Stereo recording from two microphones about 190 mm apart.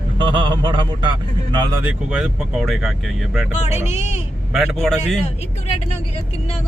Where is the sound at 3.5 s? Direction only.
35° left (ahead or behind).